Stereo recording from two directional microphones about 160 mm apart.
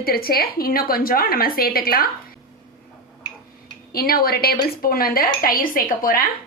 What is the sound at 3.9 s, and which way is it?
Speech, 70° left (ahead or behind).